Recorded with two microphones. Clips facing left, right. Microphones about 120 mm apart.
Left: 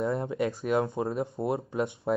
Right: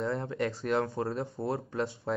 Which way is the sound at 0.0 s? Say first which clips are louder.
Left 3 dB; 15° left (ahead or behind).